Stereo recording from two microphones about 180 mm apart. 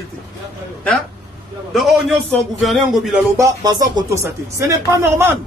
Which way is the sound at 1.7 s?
Centre (ahead or behind).